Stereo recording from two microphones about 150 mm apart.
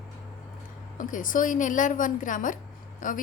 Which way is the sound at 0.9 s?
60° left (ahead or behind).